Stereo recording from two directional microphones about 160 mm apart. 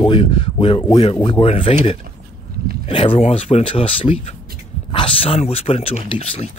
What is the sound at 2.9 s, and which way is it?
Speech, 35° left (ahead or behind).